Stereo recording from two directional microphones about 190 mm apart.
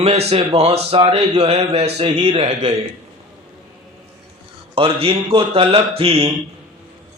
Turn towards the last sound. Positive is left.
turn(degrees=-30)  # may be behind; listen again after turning